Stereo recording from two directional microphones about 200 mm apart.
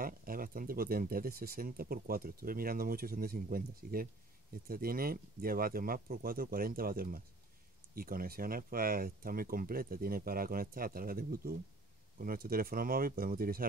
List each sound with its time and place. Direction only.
0.0 s speech: 45° right (ahead or behind)